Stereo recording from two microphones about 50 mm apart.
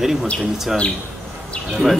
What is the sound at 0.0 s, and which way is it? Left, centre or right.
Speech, centre.